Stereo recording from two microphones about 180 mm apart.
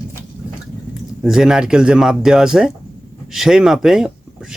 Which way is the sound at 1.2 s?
5° right (ahead or behind).